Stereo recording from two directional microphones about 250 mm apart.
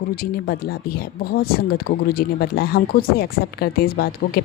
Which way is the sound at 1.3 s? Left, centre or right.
Left.